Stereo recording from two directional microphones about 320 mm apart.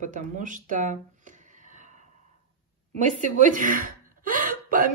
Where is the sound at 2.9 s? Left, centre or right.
Right.